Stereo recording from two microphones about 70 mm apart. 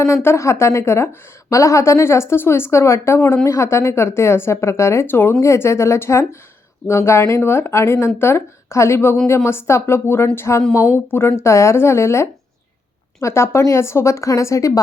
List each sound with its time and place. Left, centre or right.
0.0 s a woman's voice: left